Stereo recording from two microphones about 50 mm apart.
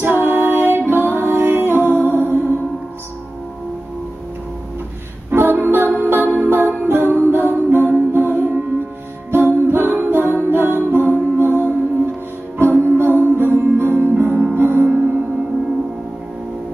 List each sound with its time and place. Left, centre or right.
0.0 s music: right
5.3 s music: right